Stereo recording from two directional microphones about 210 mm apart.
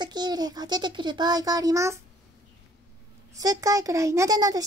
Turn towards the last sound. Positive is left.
turn(degrees=-15)  # may be behind; listen again after turning